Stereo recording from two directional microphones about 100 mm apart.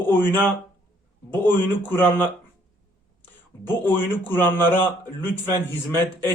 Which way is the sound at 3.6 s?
20° left (ahead or behind).